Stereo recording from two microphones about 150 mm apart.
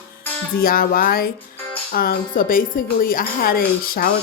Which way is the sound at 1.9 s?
80° left.